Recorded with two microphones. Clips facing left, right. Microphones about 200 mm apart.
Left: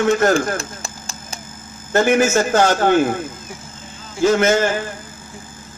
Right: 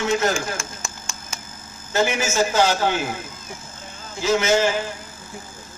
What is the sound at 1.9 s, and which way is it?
A man's voice, 55° left (ahead or behind).